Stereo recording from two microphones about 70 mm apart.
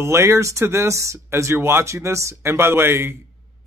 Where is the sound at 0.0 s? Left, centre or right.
Right.